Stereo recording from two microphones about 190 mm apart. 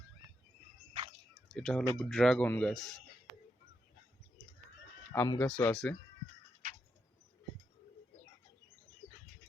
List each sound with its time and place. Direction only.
0.9 s cricket: 30° right (ahead or behind)
1.5 s speech: 5° left (ahead or behind)
5.1 s speech: 15° left (ahead or behind)